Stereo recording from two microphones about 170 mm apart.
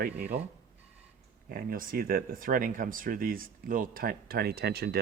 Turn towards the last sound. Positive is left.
turn(degrees=-70)  # may be behind; listen again after turning